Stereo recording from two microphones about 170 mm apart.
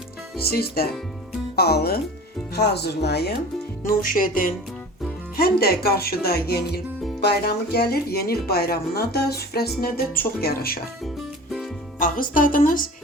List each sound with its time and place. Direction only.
0.3 s speech: 65° left (ahead or behind)
3.8 s speech: 55° left (ahead or behind)
11.9 s speech: 55° left (ahead or behind)